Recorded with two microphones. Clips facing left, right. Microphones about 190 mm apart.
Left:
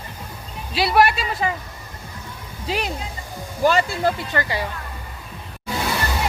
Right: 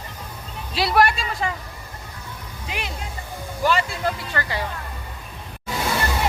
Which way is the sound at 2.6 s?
35° left (ahead or behind).